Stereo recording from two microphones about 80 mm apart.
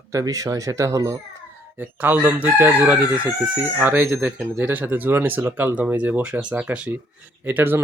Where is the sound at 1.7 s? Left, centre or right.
Right.